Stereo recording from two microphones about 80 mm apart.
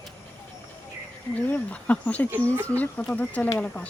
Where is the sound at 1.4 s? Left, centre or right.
Left.